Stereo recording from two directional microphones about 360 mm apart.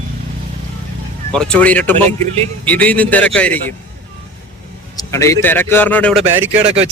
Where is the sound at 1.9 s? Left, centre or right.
Centre.